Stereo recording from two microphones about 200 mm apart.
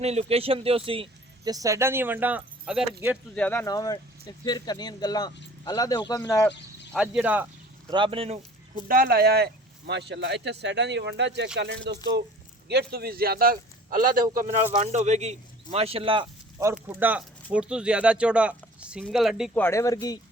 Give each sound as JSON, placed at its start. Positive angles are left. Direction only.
{"t": 0.0, "sound": "speech", "side_deg": -30}
{"t": 3.3, "sound": "speech", "side_deg": 10}
{"t": 6.9, "sound": "speech", "side_deg": -5}
{"t": 7.9, "sound": "speech", "side_deg": -25}
{"t": 8.9, "sound": "a man's voice", "side_deg": -45}
{"t": 16.8, "sound": "speech", "side_deg": -10}
{"t": 19.5, "sound": "speech", "side_deg": 10}